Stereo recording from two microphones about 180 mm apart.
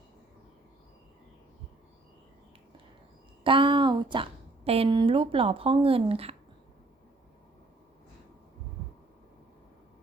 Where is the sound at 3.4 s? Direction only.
30° right (ahead or behind).